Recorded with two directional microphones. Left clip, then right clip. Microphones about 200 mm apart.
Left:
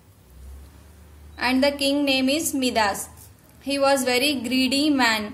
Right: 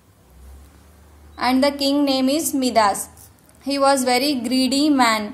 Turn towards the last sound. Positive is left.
turn(degrees=-25)  # may be behind; listen again after turning